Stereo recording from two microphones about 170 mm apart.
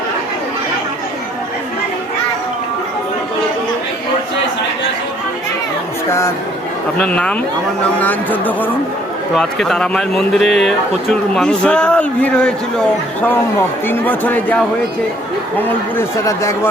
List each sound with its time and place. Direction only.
6.1 s speech: 15° left (ahead or behind)
13.8 s speech: 10° left (ahead or behind)